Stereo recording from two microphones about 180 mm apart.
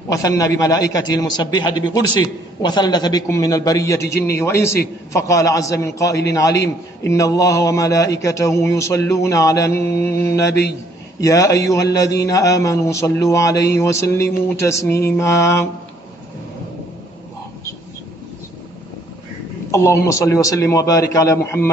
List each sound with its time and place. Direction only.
0.1 s a man's voice: 20° left (ahead or behind)
19.7 s a man's voice: 15° left (ahead or behind)